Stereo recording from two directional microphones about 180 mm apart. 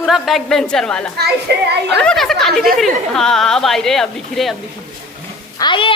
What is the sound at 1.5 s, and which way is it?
Speech, 65° right (ahead or behind).